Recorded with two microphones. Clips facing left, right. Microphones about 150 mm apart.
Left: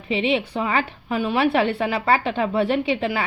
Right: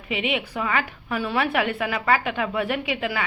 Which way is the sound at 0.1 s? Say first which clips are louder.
Left 5 dB; 30° left (ahead or behind).